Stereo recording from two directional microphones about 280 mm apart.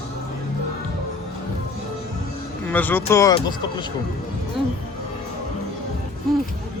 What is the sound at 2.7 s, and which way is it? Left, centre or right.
Speech, centre.